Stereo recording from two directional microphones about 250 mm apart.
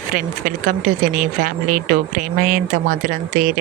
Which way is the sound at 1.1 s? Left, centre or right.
Right.